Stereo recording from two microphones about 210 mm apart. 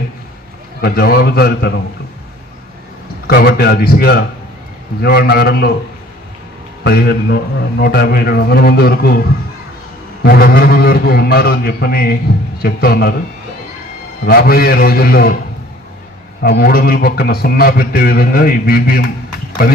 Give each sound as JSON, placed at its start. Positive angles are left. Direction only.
{"t": 0.8, "sound": "a man's voice", "side_deg": 45}
{"t": 3.2, "sound": "a man's voice", "side_deg": 50}
{"t": 6.8, "sound": "a man's voice", "side_deg": 45}
{"t": 10.2, "sound": "a man's voice", "side_deg": 45}
{"t": 14.3, "sound": "a man's voice", "side_deg": 45}
{"t": 16.4, "sound": "a man's voice", "side_deg": 45}